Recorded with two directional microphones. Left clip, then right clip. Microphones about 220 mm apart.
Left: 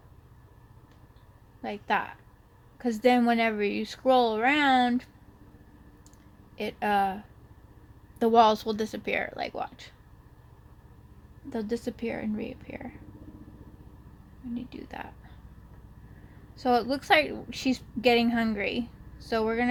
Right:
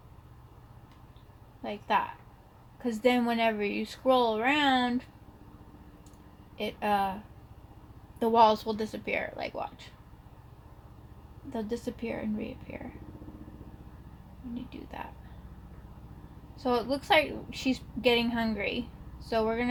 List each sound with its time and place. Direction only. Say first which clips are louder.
1.6 s a woman's voice: even; 45° left (ahead or behind)
6.6 s a woman's voice: left 2 dB; 45° left (ahead or behind)
8.2 s a woman's voice: left 2 dB; 45° left (ahead or behind)
11.5 s a woman's voice: left 3 dB; 45° left (ahead or behind)
14.7 s a woman's voice: left 2 dB; 45° left (ahead or behind)
16.6 s a woman's voice: left 4 dB; 45° left (ahead or behind)